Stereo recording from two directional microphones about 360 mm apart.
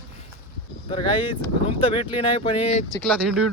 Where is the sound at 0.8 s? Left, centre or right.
Centre.